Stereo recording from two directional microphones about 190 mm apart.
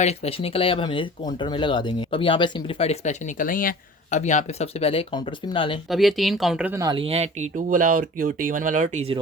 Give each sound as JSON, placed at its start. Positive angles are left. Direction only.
{"t": 0.0, "sound": "speech", "side_deg": 35}
{"t": 5.9, "sound": "speech", "side_deg": 0}
{"t": 6.7, "sound": "speech", "side_deg": -25}
{"t": 7.7, "sound": "speech", "side_deg": -45}